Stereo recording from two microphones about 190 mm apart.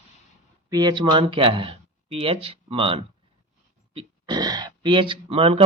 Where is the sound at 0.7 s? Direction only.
20° right (ahead or behind).